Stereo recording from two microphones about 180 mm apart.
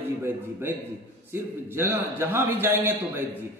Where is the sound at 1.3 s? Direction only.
15° right (ahead or behind).